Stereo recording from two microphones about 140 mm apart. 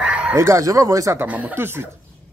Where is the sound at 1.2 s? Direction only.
10° right (ahead or behind).